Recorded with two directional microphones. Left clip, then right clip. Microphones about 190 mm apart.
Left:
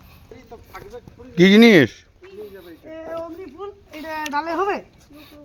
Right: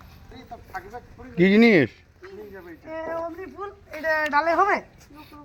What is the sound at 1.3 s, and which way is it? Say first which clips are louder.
Speech: left 5 dB; 35° left (ahead or behind).